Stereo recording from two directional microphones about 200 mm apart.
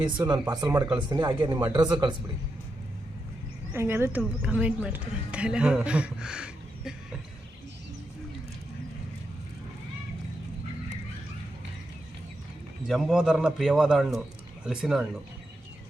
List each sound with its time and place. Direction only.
0.0 s speech: 20° right (ahead or behind)
3.7 s speech: 10° right (ahead or behind)
12.9 s speech: centre (ahead or behind)